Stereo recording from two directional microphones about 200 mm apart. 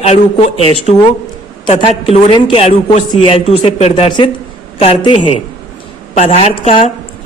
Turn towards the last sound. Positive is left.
turn(degrees=30)  # may be behind; listen again after turning